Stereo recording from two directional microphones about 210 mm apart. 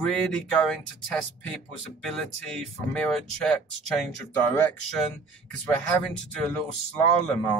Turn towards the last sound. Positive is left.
turn(degrees=5)  # may be behind; listen again after turning